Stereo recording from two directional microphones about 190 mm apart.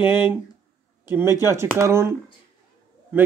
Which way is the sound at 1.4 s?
15° right (ahead or behind).